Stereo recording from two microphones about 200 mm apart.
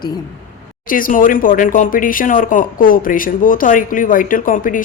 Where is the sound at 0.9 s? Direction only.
45° left (ahead or behind).